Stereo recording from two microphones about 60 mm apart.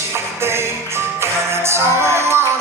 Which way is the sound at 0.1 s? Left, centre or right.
Right.